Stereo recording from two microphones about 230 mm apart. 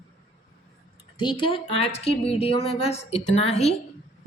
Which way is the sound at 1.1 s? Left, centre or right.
Left.